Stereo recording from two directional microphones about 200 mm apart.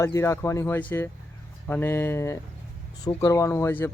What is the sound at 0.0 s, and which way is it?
Speech, 15° left (ahead or behind).